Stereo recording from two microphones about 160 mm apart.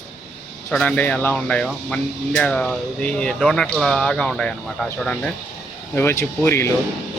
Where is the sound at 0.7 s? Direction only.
10° left (ahead or behind).